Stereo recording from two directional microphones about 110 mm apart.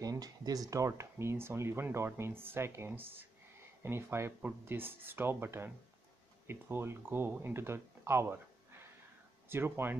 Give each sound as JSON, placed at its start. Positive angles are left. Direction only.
{"t": 0.0, "sound": "speech", "side_deg": -35}